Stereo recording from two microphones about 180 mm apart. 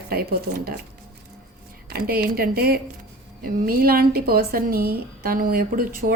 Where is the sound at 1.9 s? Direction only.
55° right (ahead or behind).